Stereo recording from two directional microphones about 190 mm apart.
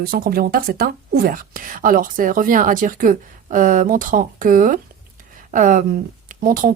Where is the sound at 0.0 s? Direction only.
50° right (ahead or behind).